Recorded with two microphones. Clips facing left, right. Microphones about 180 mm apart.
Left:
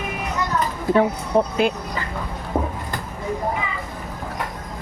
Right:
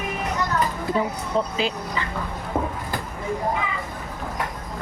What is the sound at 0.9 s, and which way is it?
Speech, 60° left (ahead or behind).